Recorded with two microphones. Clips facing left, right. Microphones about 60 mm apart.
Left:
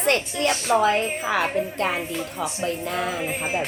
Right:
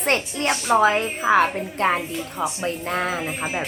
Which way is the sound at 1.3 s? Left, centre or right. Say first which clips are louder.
Right 3 dB; right.